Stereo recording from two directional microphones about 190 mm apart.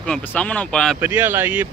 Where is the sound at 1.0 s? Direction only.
10° right (ahead or behind).